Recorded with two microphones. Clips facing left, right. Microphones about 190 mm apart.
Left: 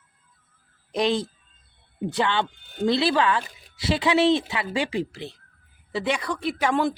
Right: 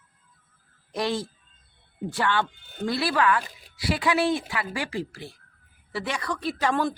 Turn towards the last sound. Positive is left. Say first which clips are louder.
# left 2 dB
turn(degrees=20)  # may be behind; listen again after turning